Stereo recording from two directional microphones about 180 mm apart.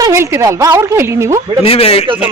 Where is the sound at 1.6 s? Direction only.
30° left (ahead or behind).